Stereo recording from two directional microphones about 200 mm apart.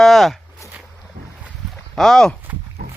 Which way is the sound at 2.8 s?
50° right (ahead or behind).